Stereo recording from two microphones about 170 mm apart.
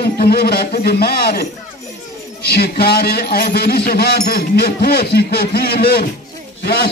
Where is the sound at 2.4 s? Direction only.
70° left (ahead or behind).